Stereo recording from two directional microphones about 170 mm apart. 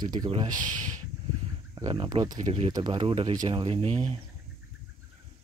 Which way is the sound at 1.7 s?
25° right (ahead or behind).